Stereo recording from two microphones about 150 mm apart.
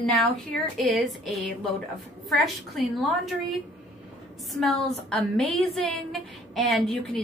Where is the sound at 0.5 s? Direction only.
Centre (ahead or behind).